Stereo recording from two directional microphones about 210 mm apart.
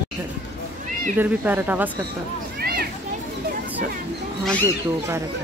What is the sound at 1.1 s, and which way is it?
Speech, 10° right (ahead or behind).